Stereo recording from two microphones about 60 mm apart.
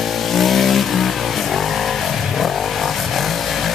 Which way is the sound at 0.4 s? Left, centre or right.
Centre.